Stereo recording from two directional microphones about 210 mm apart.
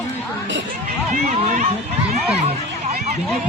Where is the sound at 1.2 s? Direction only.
35° right (ahead or behind).